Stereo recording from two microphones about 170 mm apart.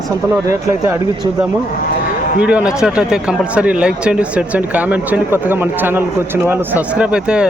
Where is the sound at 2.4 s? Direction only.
5° right (ahead or behind).